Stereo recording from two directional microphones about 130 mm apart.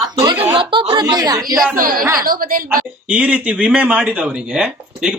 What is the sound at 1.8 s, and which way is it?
Speech, 90° right.